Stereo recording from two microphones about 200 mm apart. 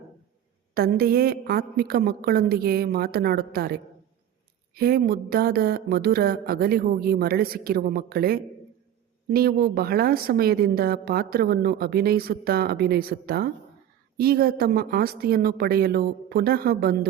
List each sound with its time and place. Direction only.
0.7 s speech: 50° right (ahead or behind)